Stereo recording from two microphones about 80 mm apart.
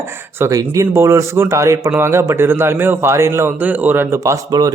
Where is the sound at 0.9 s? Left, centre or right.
Right.